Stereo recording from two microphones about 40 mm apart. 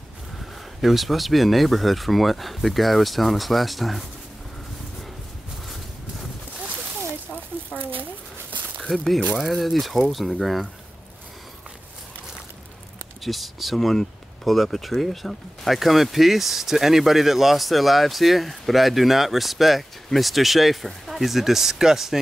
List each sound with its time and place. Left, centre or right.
0.7 s speech: centre
8.0 s a sound: right
8.9 s speech: centre
13.2 s speech: centre